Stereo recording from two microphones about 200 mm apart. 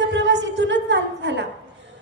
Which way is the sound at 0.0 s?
60° right (ahead or behind).